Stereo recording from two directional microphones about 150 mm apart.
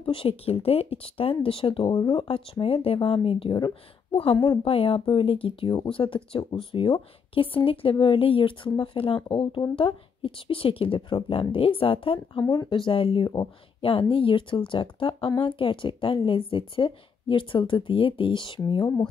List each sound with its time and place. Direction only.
0.0 s speech: 35° left (ahead or behind)